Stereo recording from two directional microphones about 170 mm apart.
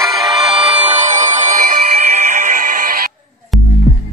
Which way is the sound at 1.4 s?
50° right (ahead or behind).